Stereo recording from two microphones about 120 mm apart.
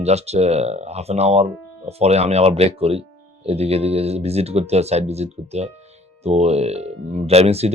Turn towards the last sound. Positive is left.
turn(degrees=-60)  # may be behind; listen again after turning